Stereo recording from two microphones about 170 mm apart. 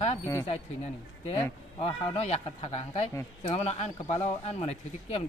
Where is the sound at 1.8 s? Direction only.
35° left (ahead or behind).